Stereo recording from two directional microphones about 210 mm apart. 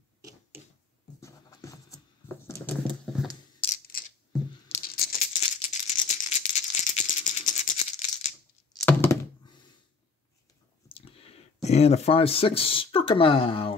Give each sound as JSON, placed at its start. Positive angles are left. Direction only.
{"t": 1.2, "sound": "patter", "side_deg": 15}
{"t": 3.6, "sound": "a sound", "side_deg": 25}
{"t": 4.8, "sound": "rattle", "side_deg": 45}
{"t": 8.7, "sound": "thunk", "side_deg": 15}
{"t": 10.9, "sound": "speech", "side_deg": 25}